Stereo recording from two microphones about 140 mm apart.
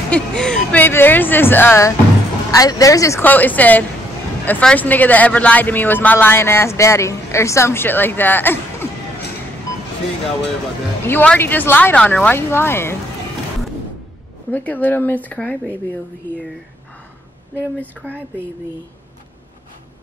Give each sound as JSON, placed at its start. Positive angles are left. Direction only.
{"t": 0.1, "sound": "a man's voice", "side_deg": 5}
{"t": 11.1, "sound": "a man's voice", "side_deg": 15}
{"t": 14.5, "sound": "a man's voice", "side_deg": 10}
{"t": 17.6, "sound": "a man's voice", "side_deg": 10}